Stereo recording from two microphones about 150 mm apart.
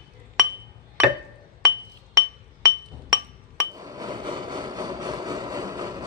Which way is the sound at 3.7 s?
25° right (ahead or behind).